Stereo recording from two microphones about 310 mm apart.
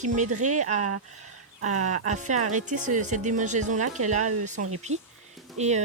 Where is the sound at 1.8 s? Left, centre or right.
Right.